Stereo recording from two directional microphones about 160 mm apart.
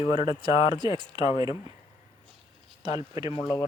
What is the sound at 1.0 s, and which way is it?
Speech, 25° right (ahead or behind).